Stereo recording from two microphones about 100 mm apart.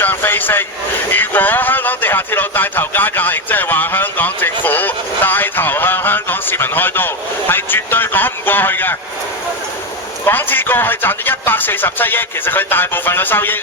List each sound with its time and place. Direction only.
0.0 s a sound: 20° left (ahead or behind)
1.1 s music: 20° left (ahead or behind)
10.2 s speech: 20° left (ahead or behind)